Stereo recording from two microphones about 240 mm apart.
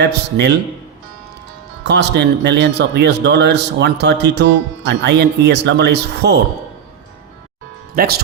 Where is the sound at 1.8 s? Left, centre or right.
Right.